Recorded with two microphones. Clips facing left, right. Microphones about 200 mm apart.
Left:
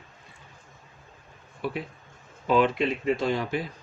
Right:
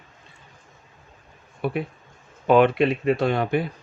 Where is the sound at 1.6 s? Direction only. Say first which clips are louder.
Right 5 dB; 60° right (ahead or behind).